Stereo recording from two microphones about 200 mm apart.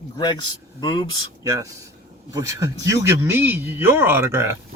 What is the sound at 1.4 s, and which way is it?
Speech, 15° right (ahead or behind).